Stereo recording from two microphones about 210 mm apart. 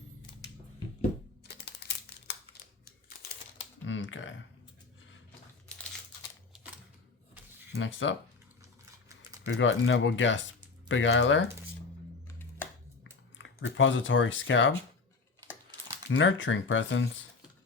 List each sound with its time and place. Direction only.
1.8 s crumpling: 50° left (ahead or behind)
3.8 s computer keyboard: 65° left (ahead or behind)
7.8 s speech: 65° left (ahead or behind)
9.5 s speech: 65° left (ahead or behind)
12.3 s music: 10° left (ahead or behind)
13.4 s speech: 65° left (ahead or behind)
16.0 s speech: 65° left (ahead or behind)